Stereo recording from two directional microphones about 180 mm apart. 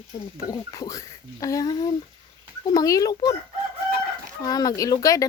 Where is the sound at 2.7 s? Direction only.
20° left (ahead or behind).